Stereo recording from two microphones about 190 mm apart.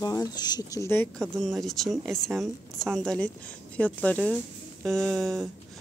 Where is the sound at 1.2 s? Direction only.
Centre (ahead or behind).